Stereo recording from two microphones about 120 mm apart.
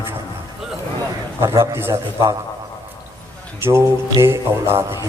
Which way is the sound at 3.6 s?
20° right (ahead or behind).